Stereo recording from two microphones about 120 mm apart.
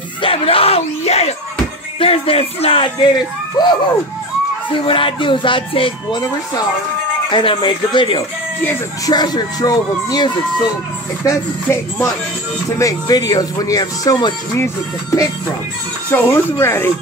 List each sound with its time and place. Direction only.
0.2 s speech: 50° left (ahead or behind)
3.6 s speech: 35° left (ahead or behind)
4.6 s speech: 45° left (ahead or behind)
11.6 s speech: 20° left (ahead or behind)